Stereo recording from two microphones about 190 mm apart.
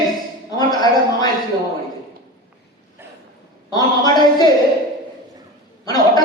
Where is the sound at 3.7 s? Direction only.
20° left (ahead or behind).